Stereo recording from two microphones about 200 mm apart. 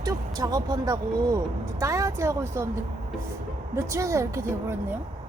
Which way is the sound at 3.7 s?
15° right (ahead or behind).